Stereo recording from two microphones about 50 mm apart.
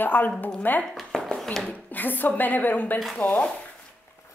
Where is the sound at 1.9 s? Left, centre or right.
Left.